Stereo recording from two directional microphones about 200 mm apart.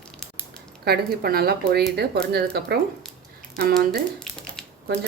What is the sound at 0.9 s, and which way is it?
Speech, 50° right (ahead or behind).